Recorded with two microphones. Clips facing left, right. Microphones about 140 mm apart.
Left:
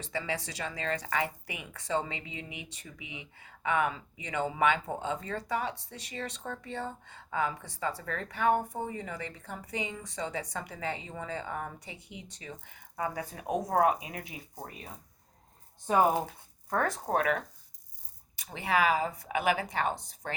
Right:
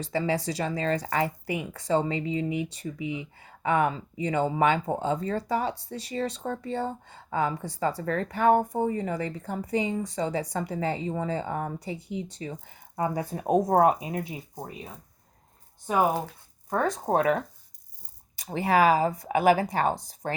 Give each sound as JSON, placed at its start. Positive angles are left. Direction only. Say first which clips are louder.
{"t": 0.0, "sound": "speech", "louder": "right 8 dB", "side_deg": -40}
{"t": 14.5, "sound": "speech", "louder": "right 5 dB", "side_deg": -15}
{"t": 16.6, "sound": "speech", "louder": "right 4 dB", "side_deg": -15}